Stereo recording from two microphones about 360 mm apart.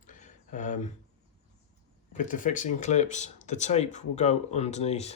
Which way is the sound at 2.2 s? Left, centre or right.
Left.